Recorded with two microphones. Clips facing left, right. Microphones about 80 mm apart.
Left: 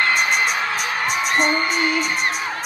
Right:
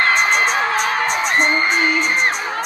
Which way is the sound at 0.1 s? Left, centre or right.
Right.